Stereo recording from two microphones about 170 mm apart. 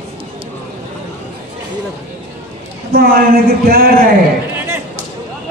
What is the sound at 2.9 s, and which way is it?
A man's voice, 60° right (ahead or behind).